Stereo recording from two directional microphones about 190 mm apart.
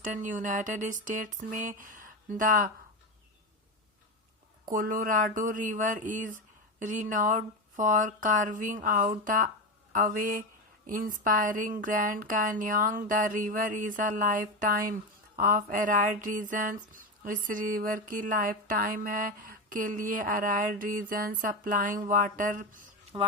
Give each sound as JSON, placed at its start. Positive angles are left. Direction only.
{"t": 0.0, "sound": "speech", "side_deg": -40}
{"t": 4.7, "sound": "speech", "side_deg": -45}